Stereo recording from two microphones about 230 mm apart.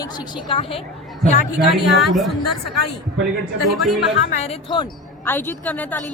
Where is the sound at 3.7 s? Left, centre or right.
Centre.